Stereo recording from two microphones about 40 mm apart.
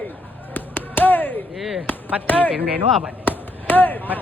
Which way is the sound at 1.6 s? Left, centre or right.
Centre.